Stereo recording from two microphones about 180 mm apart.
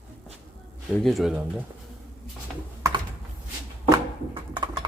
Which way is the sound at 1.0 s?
Centre (ahead or behind).